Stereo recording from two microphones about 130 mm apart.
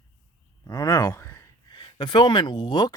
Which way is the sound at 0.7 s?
30° left (ahead or behind).